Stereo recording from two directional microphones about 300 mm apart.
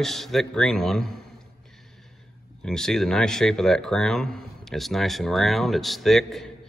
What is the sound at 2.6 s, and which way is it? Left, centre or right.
Speech, centre.